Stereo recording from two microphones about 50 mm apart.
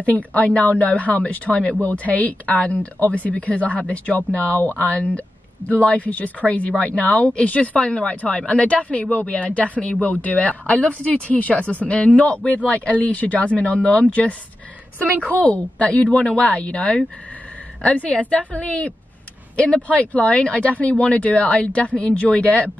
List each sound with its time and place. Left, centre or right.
0.0 s speech: left
15.0 s a woman's voice: right
15.2 s speech: left